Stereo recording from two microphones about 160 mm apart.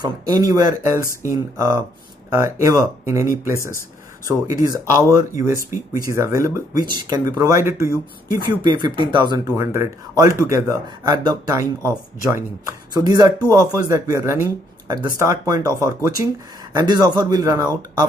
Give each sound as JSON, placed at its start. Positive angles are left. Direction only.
{"t": 0.0, "sound": "speech", "side_deg": -25}
{"t": 8.6, "sound": "speech", "side_deg": -30}
{"t": 11.6, "sound": "speech", "side_deg": 15}
{"t": 12.3, "sound": "speech", "side_deg": -15}